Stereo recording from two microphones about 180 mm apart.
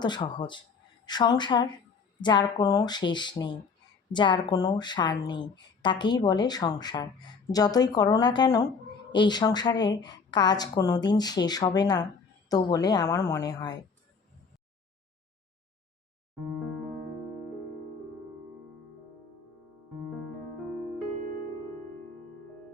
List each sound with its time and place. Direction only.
0.0 s speech: 25° left (ahead or behind)